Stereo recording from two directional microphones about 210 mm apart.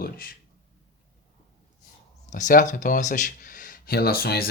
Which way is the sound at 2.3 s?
40° left (ahead or behind).